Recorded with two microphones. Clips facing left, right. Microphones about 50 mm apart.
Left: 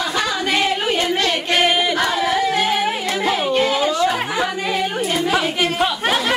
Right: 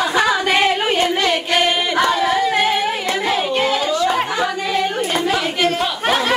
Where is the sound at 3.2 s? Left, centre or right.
Centre.